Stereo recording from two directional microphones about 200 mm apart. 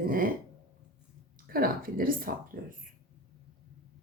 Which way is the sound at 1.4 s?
45° right (ahead or behind).